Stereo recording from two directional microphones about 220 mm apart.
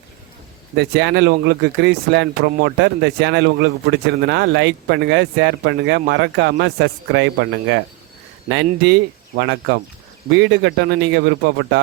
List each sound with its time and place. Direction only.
0.8 s speech: 50° right (ahead or behind)